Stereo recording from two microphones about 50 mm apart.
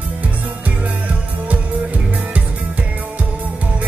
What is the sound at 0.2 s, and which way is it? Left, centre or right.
Music, right.